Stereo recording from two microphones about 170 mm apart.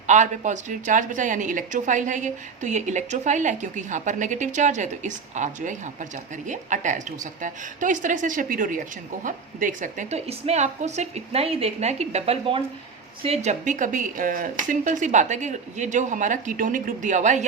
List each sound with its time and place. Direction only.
0.1 s a woman's voice: 45° right (ahead or behind)